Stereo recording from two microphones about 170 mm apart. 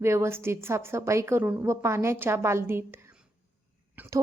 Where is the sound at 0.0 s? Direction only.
15° right (ahead or behind).